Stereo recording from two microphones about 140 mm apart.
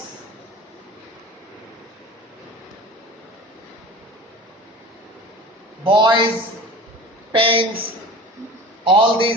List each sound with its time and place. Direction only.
5.8 s a man's voice: 35° right (ahead or behind)
7.3 s a man's voice: 40° right (ahead or behind)